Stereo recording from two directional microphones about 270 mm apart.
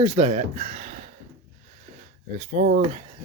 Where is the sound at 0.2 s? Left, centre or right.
Right.